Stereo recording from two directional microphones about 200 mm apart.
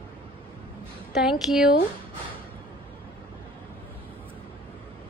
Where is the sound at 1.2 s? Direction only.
Centre (ahead or behind).